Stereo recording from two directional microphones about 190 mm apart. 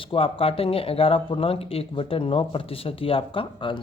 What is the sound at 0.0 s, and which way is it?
Speech, 30° left (ahead or behind).